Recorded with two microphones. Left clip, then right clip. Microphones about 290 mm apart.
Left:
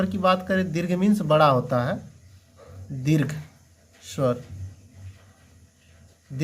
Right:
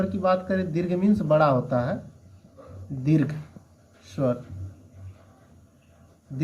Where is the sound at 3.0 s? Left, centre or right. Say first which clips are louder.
Right 1 dB; left.